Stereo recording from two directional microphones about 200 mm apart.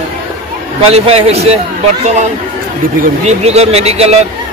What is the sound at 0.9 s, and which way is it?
Speech, 30° right (ahead or behind).